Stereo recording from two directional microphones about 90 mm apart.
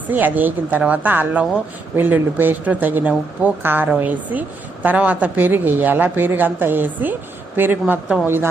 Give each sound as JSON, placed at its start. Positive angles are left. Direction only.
{"t": 0.1, "sound": "speech", "side_deg": -20}